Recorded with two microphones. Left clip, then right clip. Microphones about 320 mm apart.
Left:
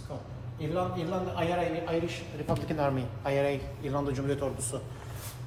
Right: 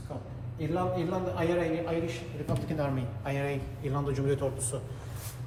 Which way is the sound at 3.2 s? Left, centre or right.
Left.